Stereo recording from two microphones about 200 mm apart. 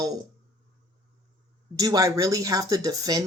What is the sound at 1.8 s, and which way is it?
Speech, 15° right (ahead or behind).